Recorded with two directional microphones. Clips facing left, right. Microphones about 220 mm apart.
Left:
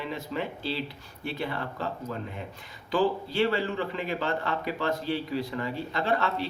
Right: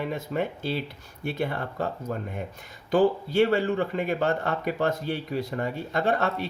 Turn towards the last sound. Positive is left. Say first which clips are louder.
# right 2 dB
turn(degrees=-50)  # may be behind; listen again after turning